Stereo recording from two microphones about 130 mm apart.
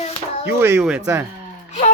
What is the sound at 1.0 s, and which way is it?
Speech, 20° right (ahead or behind).